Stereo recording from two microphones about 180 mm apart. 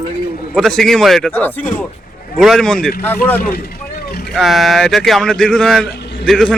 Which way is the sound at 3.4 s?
55° left (ahead or behind).